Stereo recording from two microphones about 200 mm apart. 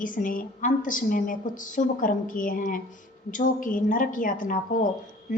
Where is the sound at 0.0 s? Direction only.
40° left (ahead or behind).